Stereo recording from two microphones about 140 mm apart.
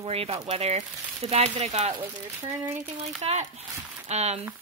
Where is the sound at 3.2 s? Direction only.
45° right (ahead or behind).